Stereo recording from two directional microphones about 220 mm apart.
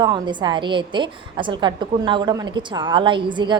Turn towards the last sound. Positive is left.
turn(degrees=-20)  # may be behind; listen again after turning